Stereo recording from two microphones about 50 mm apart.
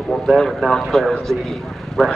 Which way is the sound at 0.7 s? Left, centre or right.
Centre.